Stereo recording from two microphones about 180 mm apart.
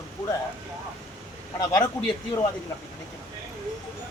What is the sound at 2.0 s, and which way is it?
Speech, 5° left (ahead or behind).